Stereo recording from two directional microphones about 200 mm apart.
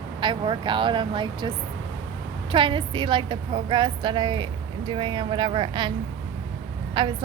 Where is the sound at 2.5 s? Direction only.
25° right (ahead or behind).